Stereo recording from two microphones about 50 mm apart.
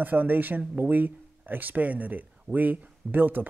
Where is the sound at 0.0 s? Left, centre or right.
Right.